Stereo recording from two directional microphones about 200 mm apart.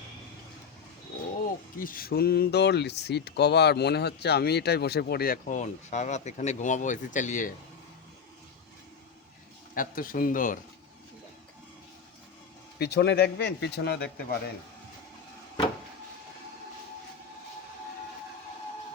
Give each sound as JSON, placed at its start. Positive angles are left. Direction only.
{"t": 1.8, "sound": "speech", "side_deg": 45}
{"t": 9.7, "sound": "speech", "side_deg": 45}
{"t": 12.8, "sound": "speech", "side_deg": 55}